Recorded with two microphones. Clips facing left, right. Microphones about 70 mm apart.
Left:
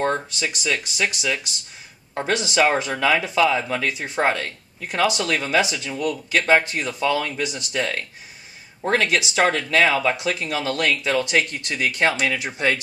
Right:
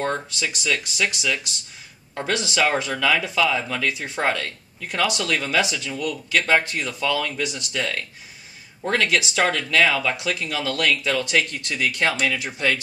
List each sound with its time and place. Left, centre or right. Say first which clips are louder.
0.0 s speech: left 2 dB; centre